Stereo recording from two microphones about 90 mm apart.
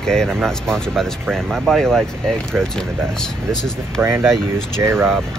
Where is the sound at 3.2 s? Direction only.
5° left (ahead or behind).